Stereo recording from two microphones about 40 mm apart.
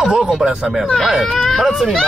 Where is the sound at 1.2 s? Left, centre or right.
Centre.